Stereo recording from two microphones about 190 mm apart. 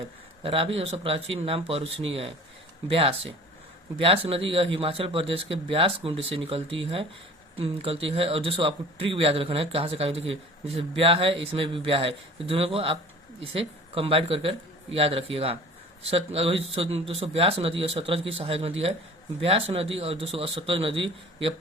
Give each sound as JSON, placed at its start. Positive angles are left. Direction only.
{"t": 0.4, "sound": "a man's voice", "side_deg": -30}